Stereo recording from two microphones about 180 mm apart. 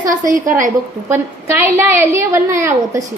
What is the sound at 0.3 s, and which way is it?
Speech, 45° right (ahead or behind).